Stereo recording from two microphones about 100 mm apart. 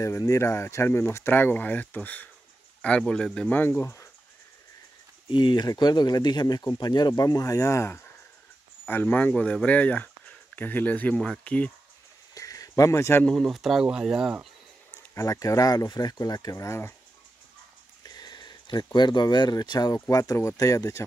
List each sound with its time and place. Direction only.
0.0 s speech: 30° left (ahead or behind); by 3.5 s 10° left (ahead or behind)
3.5 s speech: 25° left (ahead or behind)
5.3 s speech: 50° left (ahead or behind); by 11.7 s 15° left (ahead or behind)
12.4 s a sound: 35° left (ahead or behind)
13.2 s speech: 5° left (ahead or behind)
15.1 s speech: 35° left (ahead or behind)
18.0 s speech: 40° left (ahead or behind)